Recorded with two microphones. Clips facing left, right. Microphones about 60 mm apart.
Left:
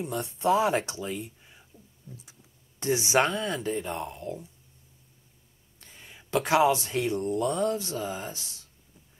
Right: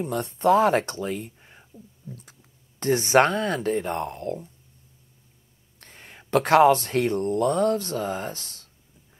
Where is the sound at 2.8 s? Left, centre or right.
Right.